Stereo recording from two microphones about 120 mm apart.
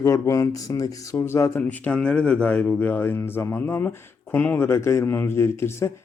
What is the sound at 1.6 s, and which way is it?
Speech, 10° left (ahead or behind).